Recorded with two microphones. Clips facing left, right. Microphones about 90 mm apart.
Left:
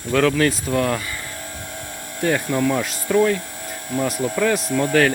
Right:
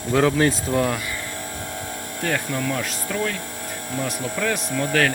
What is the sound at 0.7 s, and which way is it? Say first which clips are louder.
Speech: left 1 dB; 10° right (ahead or behind).